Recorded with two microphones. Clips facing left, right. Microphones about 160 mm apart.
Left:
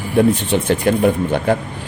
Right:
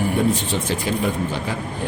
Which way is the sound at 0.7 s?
60° left (ahead or behind).